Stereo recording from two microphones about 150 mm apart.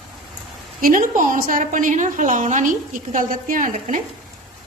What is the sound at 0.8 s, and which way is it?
A woman's voice, 65° right (ahead or behind).